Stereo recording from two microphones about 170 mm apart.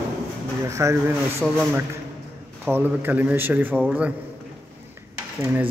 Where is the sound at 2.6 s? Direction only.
10° right (ahead or behind).